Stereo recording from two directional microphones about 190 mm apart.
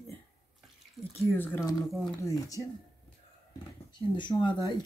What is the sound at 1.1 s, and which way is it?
Speech, 10° left (ahead or behind).